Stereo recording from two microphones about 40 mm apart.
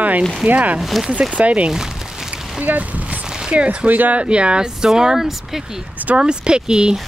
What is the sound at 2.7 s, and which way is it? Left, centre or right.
Speech, right.